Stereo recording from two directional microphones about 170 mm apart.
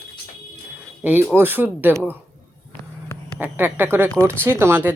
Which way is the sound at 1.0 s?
10° right (ahead or behind).